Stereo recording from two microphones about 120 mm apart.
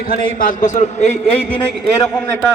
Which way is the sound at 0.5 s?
90° left.